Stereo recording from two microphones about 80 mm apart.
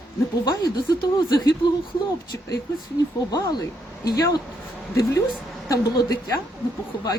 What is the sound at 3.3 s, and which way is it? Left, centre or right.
A woman's voice, left.